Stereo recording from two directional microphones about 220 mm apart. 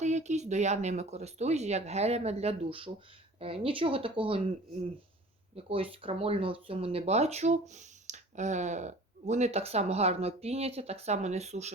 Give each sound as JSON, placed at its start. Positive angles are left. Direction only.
{"t": 0.0, "sound": "speech", "side_deg": -30}
{"t": 5.5, "sound": "speech", "side_deg": -25}